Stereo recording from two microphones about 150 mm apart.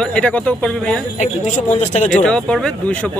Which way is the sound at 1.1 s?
50° left (ahead or behind).